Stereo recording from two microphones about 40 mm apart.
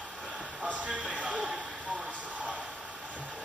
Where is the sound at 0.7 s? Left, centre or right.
Right.